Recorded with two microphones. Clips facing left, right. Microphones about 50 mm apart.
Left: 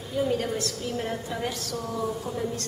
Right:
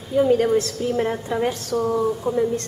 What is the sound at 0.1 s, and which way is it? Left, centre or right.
A woman's voice, right.